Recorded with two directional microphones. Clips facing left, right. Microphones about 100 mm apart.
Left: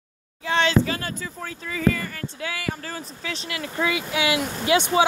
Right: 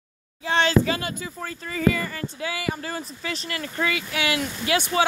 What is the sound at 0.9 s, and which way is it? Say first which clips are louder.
Speech: right 1 dB; 10° right (ahead or behind).